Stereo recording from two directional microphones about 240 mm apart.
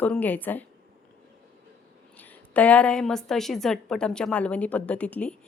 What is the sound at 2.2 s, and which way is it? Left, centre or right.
A woman's voice, centre.